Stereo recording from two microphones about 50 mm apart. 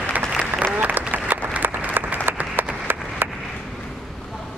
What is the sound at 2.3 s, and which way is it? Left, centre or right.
Applause, right.